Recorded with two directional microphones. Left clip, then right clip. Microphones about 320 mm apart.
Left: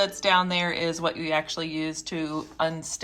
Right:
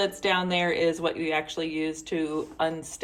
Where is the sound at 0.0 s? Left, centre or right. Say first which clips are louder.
Left 3 dB; centre.